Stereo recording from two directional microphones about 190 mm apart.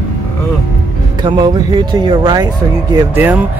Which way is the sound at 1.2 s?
20° right (ahead or behind).